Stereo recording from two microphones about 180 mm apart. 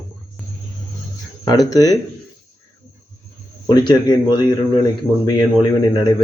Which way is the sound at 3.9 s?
25° left (ahead or behind).